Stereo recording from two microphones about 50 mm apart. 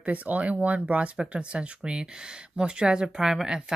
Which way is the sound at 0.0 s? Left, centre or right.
Right.